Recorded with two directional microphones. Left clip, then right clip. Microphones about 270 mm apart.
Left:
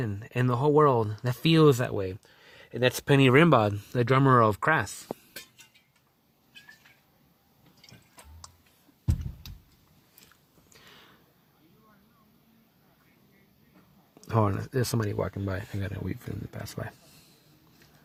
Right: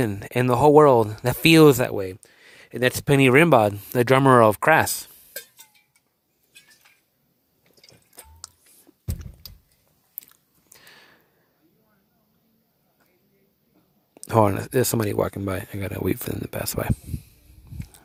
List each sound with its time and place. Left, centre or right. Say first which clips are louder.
0.0 s speech: right 8 dB; right
8.1 s drip: right 8 dB; right
10.7 s a sound: right 4 dB; centre
14.2 s speech: right 9 dB; centre
16.0 s speech: right 12 dB; right